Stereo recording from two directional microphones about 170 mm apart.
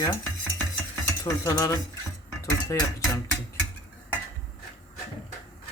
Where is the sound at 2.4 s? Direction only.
20° left (ahead or behind).